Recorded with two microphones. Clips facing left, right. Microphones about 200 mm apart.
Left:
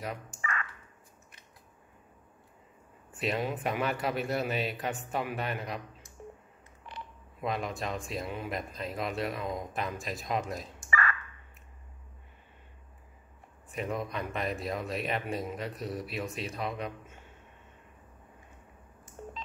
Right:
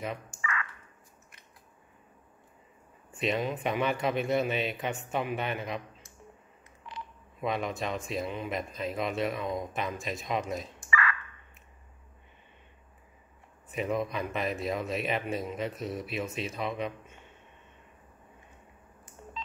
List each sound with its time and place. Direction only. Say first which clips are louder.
0.3 s a sound: right 1 dB; 55° left (ahead or behind)
3.1 s a man's voice: right 2 dB; centre (ahead or behind)
7.4 s a man's voice: right 2 dB; centre (ahead or behind)
13.7 s a man's voice: right 4 dB; centre (ahead or behind)